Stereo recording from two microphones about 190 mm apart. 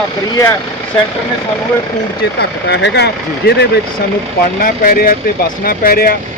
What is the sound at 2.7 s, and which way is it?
Speech, 65° left (ahead or behind).